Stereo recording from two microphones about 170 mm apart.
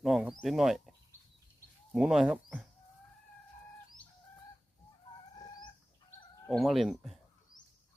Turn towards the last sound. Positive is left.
turn(degrees=0)  # may be behind; listen again after turning